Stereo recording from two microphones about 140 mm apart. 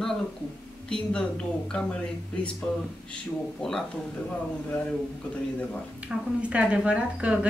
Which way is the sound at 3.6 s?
5° left (ahead or behind).